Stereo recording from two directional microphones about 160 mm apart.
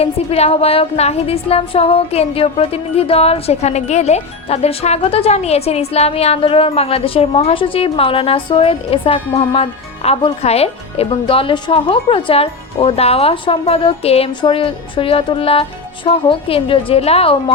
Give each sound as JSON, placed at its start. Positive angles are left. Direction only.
{"t": 0.0, "sound": "a woman's voice", "side_deg": 40}